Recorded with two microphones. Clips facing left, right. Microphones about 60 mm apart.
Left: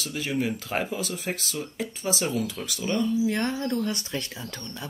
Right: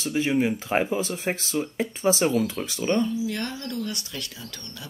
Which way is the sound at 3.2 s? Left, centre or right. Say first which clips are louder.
Left 4 dB; left.